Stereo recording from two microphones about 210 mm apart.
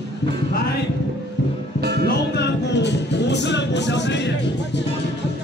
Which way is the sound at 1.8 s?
50° right (ahead or behind).